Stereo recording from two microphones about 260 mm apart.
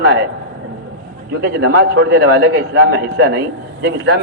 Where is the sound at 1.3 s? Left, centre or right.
Right.